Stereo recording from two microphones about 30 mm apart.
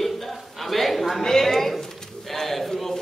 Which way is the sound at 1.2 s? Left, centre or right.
Centre.